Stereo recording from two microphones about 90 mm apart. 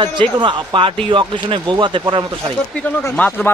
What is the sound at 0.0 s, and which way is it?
Speech, 65° right (ahead or behind).